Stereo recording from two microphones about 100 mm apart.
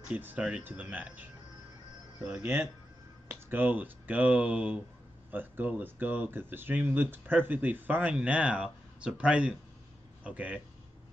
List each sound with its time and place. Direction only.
0.1 s speech: 15° right (ahead or behind)
2.4 s speech: 25° right (ahead or behind)